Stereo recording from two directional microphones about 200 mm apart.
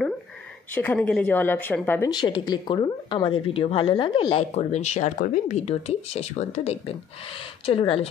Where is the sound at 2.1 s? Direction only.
20° left (ahead or behind).